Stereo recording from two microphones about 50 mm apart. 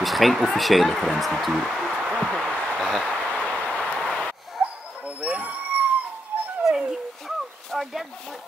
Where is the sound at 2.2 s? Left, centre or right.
Centre.